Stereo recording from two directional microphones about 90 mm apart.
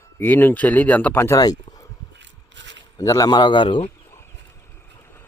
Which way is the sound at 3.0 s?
40° left (ahead or behind).